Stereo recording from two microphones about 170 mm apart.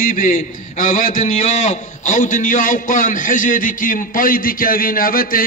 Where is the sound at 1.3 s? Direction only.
40° left (ahead or behind).